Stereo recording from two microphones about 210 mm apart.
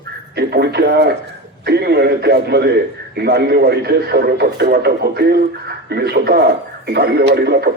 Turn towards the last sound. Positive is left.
turn(degrees=-50)  # may be behind; listen again after turning